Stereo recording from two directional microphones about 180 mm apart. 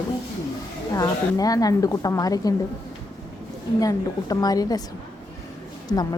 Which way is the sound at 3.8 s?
20° left (ahead or behind).